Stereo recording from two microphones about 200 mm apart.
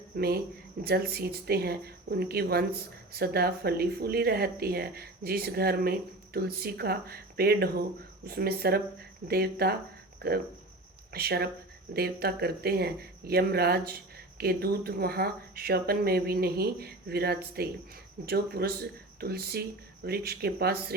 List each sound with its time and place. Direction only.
0.2 s a woman's voice: 50° right (ahead or behind)